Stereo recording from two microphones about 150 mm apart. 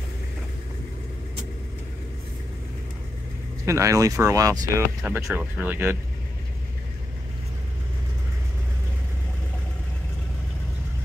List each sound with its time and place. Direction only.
3.6 s speech: 20° right (ahead or behind)